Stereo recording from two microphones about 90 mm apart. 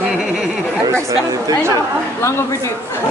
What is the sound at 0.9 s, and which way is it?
Speech, 35° right (ahead or behind).